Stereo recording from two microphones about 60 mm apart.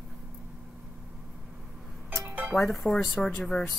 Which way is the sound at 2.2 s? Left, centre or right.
Right.